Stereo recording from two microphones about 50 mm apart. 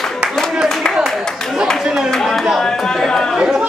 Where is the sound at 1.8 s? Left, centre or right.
Centre.